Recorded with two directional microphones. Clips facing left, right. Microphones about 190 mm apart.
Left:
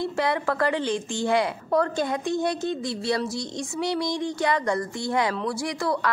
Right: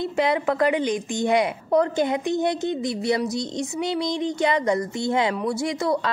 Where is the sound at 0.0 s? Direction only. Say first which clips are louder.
Right 3 dB; 20° right (ahead or behind).